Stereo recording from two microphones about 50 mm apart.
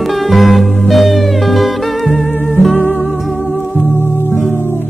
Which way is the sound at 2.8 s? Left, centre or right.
Left.